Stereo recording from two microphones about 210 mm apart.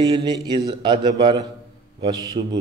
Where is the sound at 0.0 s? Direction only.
20° right (ahead or behind).